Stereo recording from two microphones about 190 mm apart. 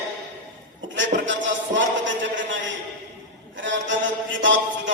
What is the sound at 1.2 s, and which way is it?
A man's voice, 75° right (ahead or behind).